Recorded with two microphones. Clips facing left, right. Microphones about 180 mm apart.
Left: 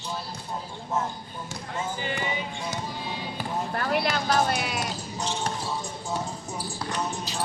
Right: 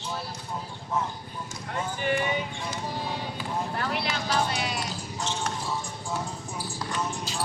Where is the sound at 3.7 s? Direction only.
50° left (ahead or behind).